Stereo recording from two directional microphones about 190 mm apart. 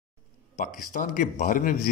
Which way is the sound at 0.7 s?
40° left (ahead or behind).